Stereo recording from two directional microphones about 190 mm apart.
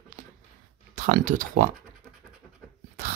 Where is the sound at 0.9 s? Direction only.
40° right (ahead or behind).